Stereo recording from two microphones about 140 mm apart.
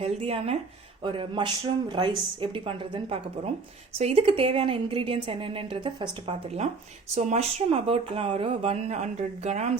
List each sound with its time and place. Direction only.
0.0 s a woman's voice: 45° right (ahead or behind)